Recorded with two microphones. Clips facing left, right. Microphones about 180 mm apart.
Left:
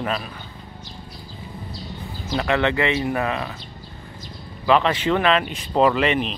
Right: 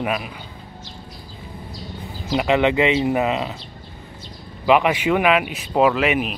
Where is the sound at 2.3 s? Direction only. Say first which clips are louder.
Right 3 dB; 15° right (ahead or behind).